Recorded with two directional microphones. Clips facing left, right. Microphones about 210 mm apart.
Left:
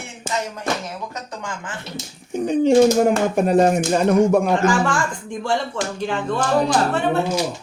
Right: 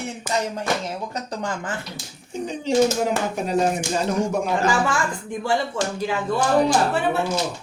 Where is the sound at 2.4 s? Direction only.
60° left (ahead or behind).